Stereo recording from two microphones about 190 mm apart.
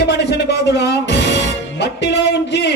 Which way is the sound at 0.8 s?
65° left (ahead or behind).